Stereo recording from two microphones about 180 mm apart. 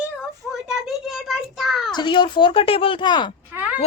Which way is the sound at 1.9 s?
25° left (ahead or behind).